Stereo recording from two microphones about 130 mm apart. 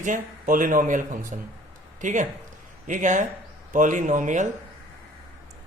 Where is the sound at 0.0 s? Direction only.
85° right.